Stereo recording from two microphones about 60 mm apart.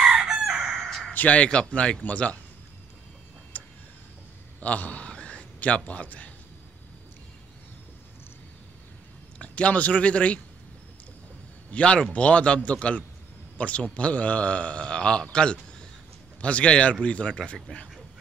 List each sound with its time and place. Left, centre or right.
0.0 s chicken: centre
0.7 s a sound: centre
1.1 s a man's voice: left
3.5 s tick-tock: left
4.6 s a sound: left
5.9 s a man's voice: left
9.4 s a man's voice: left
11.7 s a man's voice: centre